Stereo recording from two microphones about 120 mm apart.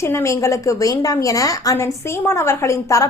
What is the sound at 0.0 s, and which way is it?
Speech, 25° left (ahead or behind).